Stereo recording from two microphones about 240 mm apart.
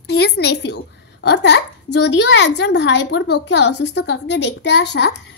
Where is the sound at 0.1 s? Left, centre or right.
Left.